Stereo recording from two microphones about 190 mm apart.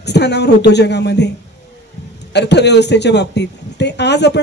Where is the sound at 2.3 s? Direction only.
65° left (ahead or behind).